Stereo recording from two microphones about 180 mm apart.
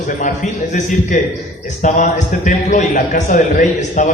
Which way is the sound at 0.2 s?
45° left (ahead or behind).